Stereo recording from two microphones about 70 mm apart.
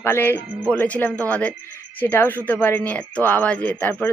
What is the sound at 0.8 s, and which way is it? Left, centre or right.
Speech, centre.